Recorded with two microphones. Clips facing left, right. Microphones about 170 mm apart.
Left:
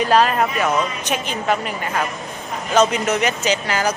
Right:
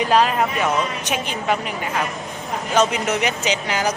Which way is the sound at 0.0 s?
15° right (ahead or behind).